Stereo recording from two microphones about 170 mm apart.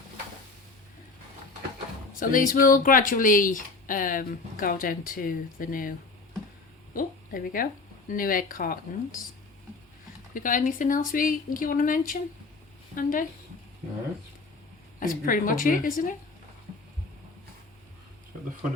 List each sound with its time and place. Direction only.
2.1 s speech: 55° left (ahead or behind)
6.9 s speech: 55° left (ahead or behind)
10.3 s speech: 50° left (ahead or behind)
14.9 s speech: 55° left (ahead or behind)